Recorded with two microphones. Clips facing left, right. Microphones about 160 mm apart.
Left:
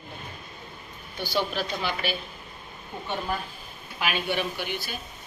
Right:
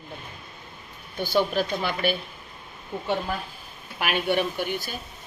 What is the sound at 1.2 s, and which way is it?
Speech, 50° right (ahead or behind).